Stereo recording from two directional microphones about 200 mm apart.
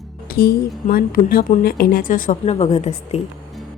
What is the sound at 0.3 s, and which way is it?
A woman's voice, 45° left (ahead or behind).